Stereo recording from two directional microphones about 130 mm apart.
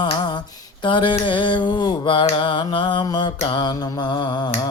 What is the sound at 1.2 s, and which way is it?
Speech, 40° left (ahead or behind).